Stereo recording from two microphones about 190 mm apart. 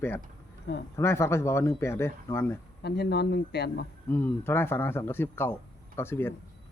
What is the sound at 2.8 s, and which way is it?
Speech, 60° left (ahead or behind).